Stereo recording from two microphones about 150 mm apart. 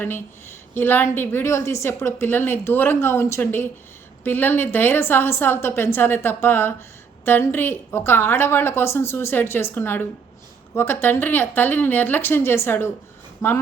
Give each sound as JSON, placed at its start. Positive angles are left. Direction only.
{"t": 0.7, "sound": "a woman's voice", "side_deg": 15}